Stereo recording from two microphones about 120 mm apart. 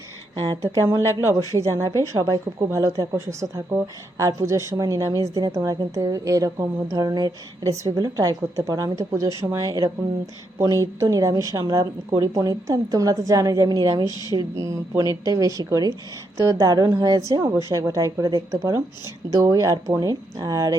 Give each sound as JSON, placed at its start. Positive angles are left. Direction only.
{"t": 1.5, "sound": "a woman's voice", "side_deg": -25}
{"t": 14.3, "sound": "a woman's voice", "side_deg": -25}